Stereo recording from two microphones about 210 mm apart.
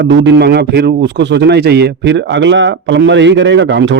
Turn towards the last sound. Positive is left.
turn(degrees=-60)  # may be behind; listen again after turning